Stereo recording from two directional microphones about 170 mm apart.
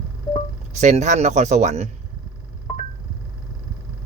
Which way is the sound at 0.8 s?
45° right (ahead or behind).